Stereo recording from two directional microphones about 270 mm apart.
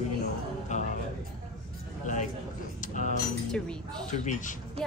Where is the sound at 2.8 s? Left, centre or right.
Left.